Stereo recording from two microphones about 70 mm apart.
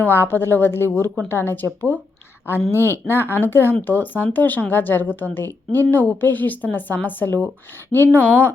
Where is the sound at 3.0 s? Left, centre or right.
Left.